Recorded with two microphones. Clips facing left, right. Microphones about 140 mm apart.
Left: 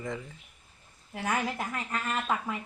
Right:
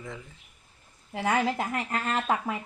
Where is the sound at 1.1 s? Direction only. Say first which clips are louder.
Right 5 dB; 25° right (ahead or behind).